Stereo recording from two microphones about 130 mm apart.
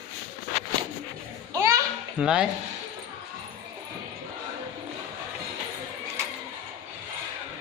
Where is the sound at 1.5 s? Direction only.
25° right (ahead or behind).